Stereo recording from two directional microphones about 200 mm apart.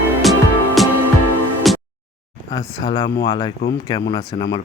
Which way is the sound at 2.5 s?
15° left (ahead or behind).